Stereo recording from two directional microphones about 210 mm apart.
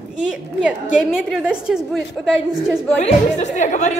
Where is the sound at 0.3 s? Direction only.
5° right (ahead or behind).